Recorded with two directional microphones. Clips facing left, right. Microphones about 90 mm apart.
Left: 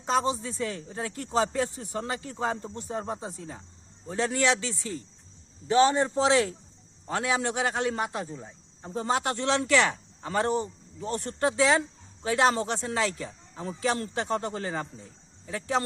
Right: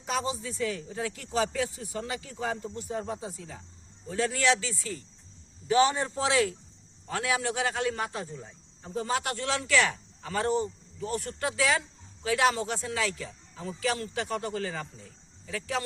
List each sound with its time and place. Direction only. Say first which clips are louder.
0.0 s a man's voice: left 5 dB; 30° left (ahead or behind)